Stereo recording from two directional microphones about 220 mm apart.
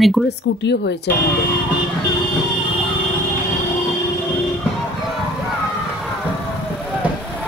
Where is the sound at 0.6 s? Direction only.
50° left (ahead or behind).